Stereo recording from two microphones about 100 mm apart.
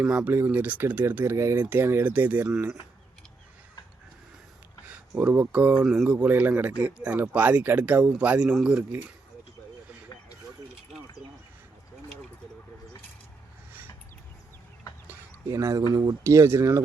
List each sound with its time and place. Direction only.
0.0 s speech: 10° right (ahead or behind)
5.1 s speech: 20° right (ahead or behind)
5.8 s speech: 5° right (ahead or behind)
6.1 s speech: 15° right (ahead or behind)
15.4 s speech: 35° right (ahead or behind)